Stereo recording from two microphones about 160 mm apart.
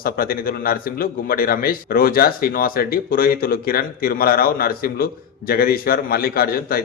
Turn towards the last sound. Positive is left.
turn(degrees=70)  # may be behind; listen again after turning